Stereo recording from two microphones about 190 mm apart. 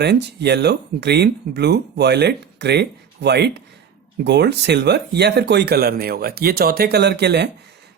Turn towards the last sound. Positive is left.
turn(degrees=-60)  # may be behind; listen again after turning